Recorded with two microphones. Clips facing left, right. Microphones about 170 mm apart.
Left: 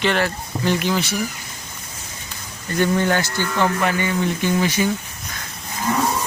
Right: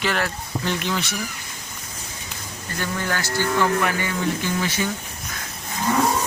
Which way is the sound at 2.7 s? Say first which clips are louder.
Left 8 dB; 25° left (ahead or behind).